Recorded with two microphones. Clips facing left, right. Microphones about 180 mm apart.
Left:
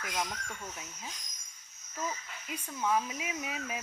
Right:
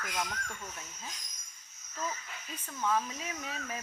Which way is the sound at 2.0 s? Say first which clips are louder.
Left 1 dB; 15° left (ahead or behind).